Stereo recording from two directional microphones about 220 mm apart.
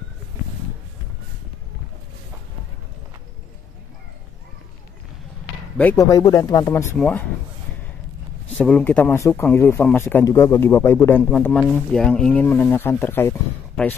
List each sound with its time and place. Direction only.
5.8 s speech: 10° left (ahead or behind)
8.5 s speech: 5° left (ahead or behind)